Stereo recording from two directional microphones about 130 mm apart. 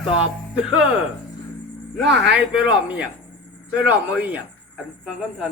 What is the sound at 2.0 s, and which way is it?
Speech, 5° right (ahead or behind).